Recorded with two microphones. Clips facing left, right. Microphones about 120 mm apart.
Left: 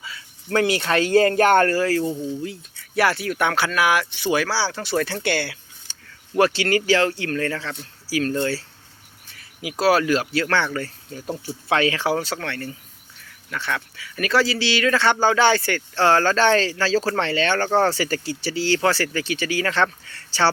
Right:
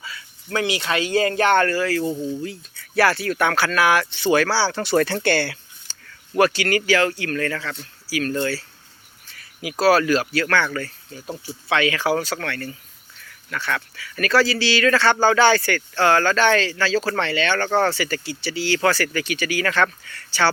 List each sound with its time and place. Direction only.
0.0 s cricket: 25° left (ahead or behind)
0.5 s speech: 50° left (ahead or behind)
2.4 s speech: 20° left (ahead or behind)
6.3 s speech: 25° left (ahead or behind)